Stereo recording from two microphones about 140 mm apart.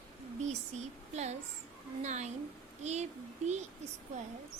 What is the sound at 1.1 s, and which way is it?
A child's voice, 50° right (ahead or behind).